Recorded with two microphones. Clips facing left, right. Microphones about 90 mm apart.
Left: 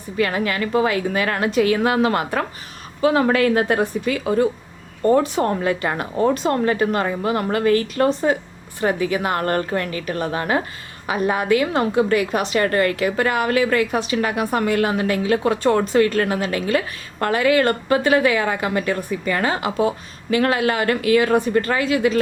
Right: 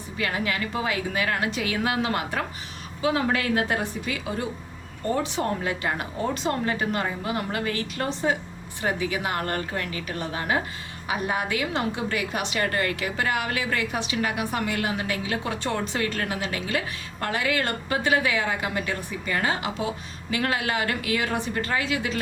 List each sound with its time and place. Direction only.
0.2 s a woman's voice: 50° left (ahead or behind)